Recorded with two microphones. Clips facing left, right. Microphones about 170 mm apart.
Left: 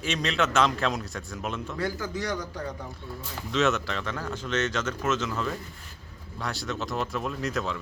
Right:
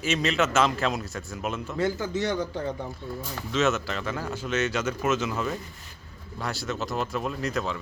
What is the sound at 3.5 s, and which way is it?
Speech, centre (ahead or behind).